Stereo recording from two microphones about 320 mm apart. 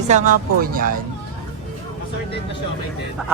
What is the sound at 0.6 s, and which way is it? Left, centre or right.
Speech, right.